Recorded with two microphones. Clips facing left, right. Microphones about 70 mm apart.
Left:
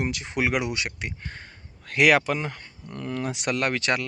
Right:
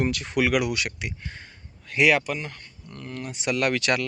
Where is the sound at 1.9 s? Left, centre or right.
Left.